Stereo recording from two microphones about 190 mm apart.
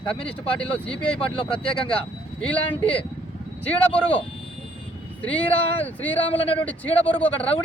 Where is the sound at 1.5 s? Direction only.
30° left (ahead or behind).